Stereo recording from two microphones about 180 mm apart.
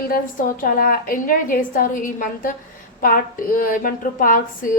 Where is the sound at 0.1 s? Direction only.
50° left (ahead or behind).